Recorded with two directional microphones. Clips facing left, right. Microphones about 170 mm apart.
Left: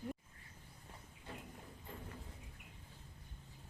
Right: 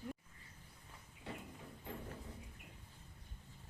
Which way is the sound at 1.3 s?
80° right.